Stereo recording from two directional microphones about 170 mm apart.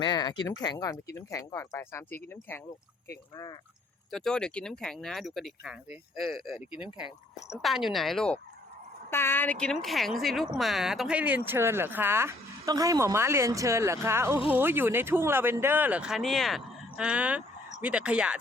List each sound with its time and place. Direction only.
0.0 s speech: 25° left (ahead or behind)
4.1 s speech: 5° left (ahead or behind)
9.0 s speech: 15° left (ahead or behind); by 18.3 s 5° right (ahead or behind)